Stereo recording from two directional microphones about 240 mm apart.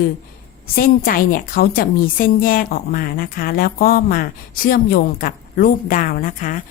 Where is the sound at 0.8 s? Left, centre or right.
Left.